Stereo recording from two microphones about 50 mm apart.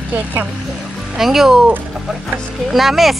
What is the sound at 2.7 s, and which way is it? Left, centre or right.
Speech, centre.